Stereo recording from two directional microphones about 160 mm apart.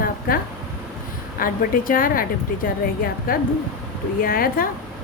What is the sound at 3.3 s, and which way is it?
Speech, 65° left (ahead or behind).